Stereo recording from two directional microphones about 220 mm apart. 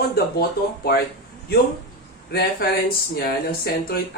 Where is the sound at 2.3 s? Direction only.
45° left (ahead or behind).